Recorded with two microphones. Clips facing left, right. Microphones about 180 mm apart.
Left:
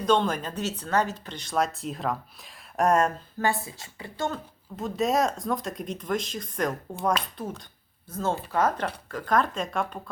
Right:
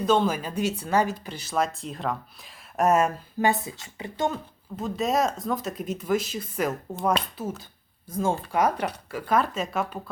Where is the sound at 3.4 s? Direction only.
20° right (ahead or behind).